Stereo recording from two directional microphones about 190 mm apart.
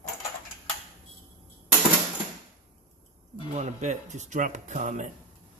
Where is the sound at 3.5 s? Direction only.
40° right (ahead or behind).